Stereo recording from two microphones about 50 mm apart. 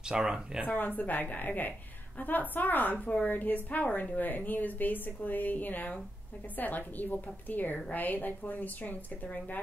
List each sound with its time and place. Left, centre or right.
0.1 s speech: centre
0.7 s a woman's voice: left